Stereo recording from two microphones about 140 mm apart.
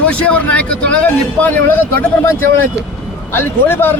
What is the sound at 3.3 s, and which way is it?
Speech, 15° left (ahead or behind).